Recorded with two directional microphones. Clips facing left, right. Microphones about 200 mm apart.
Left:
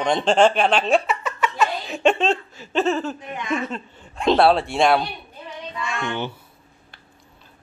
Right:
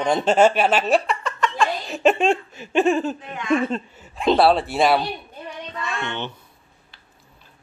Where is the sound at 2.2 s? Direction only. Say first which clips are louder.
Right 2 dB; 15° right (ahead or behind).